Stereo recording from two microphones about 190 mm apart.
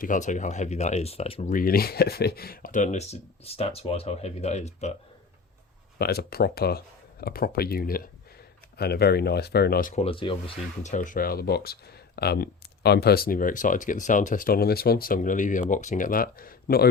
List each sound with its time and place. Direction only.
0.0 s speech: 40° left (ahead or behind)
1.5 s speech: 50° left (ahead or behind); by 4.9 s 35° left (ahead or behind)
6.0 s speech: 55° left (ahead or behind)
9.9 s speech: 30° left (ahead or behind)
10.9 s speech: 45° left (ahead or behind)